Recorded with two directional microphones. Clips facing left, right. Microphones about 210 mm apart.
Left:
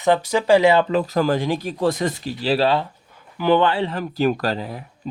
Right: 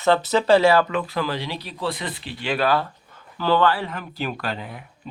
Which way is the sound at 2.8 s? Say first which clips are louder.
Even; 15° left (ahead or behind).